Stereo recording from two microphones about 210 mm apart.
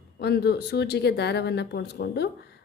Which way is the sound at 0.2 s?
50° left (ahead or behind).